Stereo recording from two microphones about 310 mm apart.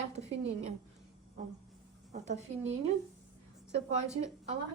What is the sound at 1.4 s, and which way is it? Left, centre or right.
A woman's voice, right.